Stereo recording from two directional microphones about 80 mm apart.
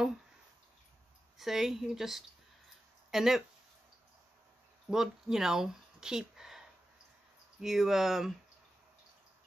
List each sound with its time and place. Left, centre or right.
1.4 s speech: centre
4.8 s speech: centre
7.6 s speech: centre